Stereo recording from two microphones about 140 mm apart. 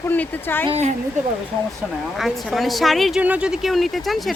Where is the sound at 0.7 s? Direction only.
55° right (ahead or behind).